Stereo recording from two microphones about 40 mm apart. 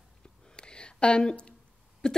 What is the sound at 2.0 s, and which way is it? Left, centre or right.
Speech, centre.